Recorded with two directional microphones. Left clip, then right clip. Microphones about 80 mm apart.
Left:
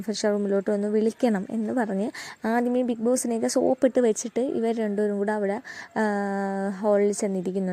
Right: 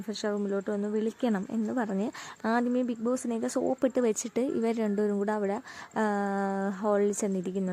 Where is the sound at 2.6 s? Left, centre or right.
Left.